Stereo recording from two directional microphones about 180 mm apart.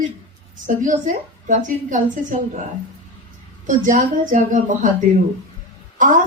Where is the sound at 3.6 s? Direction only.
45° right (ahead or behind).